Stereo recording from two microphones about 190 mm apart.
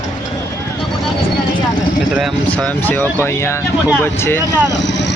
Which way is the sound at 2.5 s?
10° left (ahead or behind).